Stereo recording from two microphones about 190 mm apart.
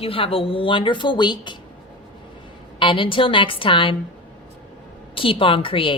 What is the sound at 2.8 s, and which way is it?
Speech, 25° left (ahead or behind).